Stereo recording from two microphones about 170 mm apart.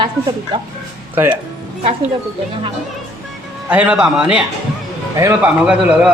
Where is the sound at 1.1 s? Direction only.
10° right (ahead or behind).